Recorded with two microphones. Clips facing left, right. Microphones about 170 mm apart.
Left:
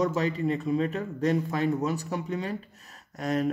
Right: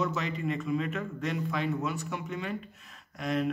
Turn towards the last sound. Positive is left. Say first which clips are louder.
# left 3 dB
turn(degrees=40)  # may be behind; listen again after turning